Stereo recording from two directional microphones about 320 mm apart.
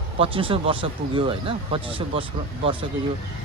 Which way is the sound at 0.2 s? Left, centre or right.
Centre.